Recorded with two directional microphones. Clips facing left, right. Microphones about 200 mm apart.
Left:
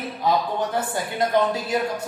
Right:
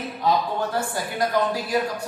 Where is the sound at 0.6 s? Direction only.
20° left (ahead or behind).